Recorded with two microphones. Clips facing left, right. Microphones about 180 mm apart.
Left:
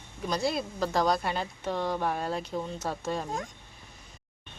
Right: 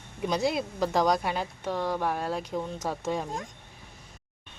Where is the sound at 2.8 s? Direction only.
15° right (ahead or behind).